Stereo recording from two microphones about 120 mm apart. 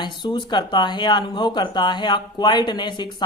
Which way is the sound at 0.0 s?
40° left (ahead or behind).